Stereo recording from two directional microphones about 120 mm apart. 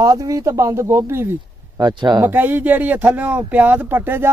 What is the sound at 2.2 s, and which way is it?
Speech, 15° right (ahead or behind).